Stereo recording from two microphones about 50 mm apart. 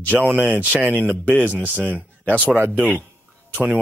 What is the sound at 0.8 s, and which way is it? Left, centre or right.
Speech, right.